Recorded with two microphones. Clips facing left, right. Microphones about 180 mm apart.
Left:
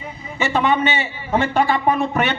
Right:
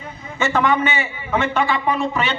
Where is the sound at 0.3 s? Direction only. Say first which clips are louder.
Even; 20° left (ahead or behind).